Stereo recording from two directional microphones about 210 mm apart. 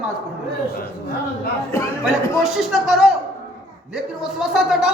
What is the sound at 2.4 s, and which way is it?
Speech, centre (ahead or behind).